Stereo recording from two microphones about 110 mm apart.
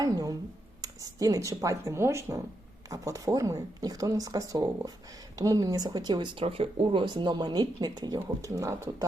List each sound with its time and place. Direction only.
0.0 s speech: 35° right (ahead or behind)
6.4 s speech: 55° right (ahead or behind); by 8.7 s 30° right (ahead or behind)